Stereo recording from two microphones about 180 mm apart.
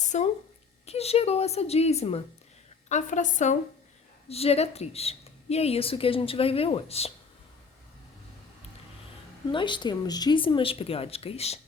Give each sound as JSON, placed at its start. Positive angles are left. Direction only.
{"t": 0.0, "sound": "a sound", "side_deg": 40}
{"t": 0.9, "sound": "a woman's voice", "side_deg": 35}
{"t": 9.5, "sound": "speech", "side_deg": 25}